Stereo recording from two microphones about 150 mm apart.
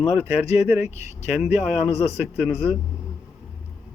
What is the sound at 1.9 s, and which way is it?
Speech, 45° left (ahead or behind).